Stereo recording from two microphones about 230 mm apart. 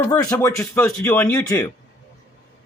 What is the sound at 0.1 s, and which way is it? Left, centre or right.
Speech, centre.